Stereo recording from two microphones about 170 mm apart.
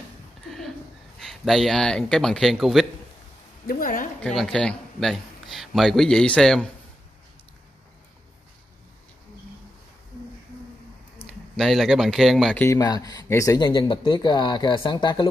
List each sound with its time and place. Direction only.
1.2 s a man's voice: centre (ahead or behind)
3.6 s a woman's voice: 55° left (ahead or behind)
4.2 s a man's voice: centre (ahead or behind)
11.5 s a man's voice: centre (ahead or behind)
12.6 s speech: 20° left (ahead or behind)